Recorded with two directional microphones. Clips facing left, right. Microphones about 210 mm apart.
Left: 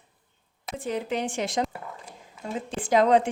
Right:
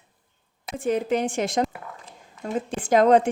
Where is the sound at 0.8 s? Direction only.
50° right (ahead or behind).